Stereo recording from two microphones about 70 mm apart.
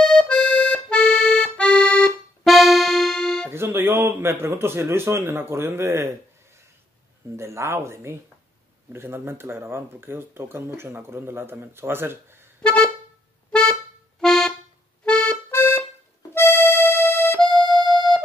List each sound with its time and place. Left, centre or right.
0.0 s accordion: centre
0.3 s accordion: left
0.8 s accordion: centre
2.4 s music: centre
3.4 s speech: right
7.3 s speech: right
12.6 s vehicle horn: centre
14.2 s music: centre
15.0 s accordion: centre
15.5 s music: left
17.6 s music: left